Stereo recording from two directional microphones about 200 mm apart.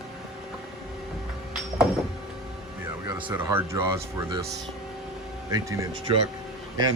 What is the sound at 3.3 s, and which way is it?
Speech, 10° right (ahead or behind).